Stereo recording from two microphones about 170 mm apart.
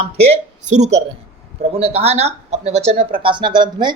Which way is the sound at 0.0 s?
40° right (ahead or behind).